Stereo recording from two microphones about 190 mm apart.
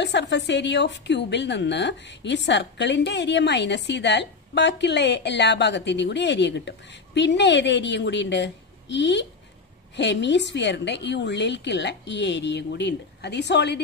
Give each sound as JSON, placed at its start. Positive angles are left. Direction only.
{"t": 0.0, "sound": "a woman's voice", "side_deg": 65}